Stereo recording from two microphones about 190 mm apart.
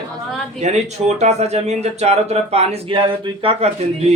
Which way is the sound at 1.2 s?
35° right (ahead or behind).